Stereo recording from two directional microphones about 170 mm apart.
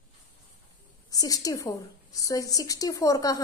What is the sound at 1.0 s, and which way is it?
A woman's voice, 20° left (ahead or behind).